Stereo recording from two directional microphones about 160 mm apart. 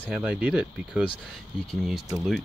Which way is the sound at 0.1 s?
10° right (ahead or behind).